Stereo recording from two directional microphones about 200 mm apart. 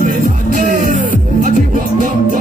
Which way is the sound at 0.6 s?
40° right (ahead or behind).